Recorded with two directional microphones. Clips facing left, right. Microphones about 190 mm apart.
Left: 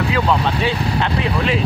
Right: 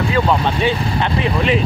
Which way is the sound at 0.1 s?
Centre (ahead or behind).